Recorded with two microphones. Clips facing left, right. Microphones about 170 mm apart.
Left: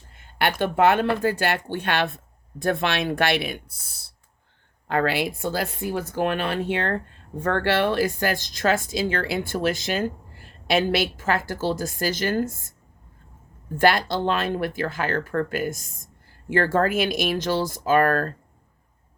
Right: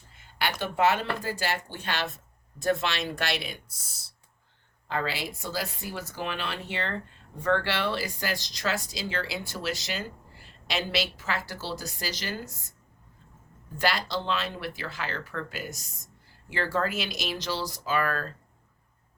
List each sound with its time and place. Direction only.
0.1 s speech: 55° left (ahead or behind)
13.7 s speech: 50° left (ahead or behind)